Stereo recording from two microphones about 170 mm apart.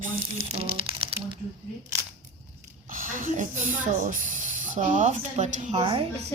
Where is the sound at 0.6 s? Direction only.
35° right (ahead or behind).